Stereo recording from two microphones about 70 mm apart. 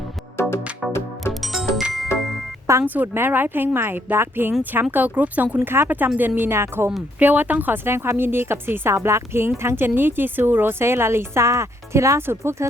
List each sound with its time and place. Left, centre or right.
0.4 s music: left
1.3 s music: centre
2.8 s speech: right
5.5 s a woman's voice: right
7.2 s speech: right
7.9 s a woman's voice: right